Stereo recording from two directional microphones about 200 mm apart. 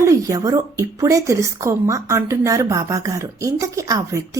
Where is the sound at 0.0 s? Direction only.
15° right (ahead or behind).